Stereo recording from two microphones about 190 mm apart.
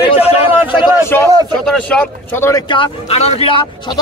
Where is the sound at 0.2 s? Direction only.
30° left (ahead or behind).